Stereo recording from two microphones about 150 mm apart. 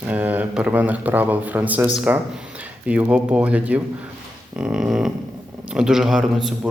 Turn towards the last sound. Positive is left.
turn(degrees=0)  # may be behind; listen again after turning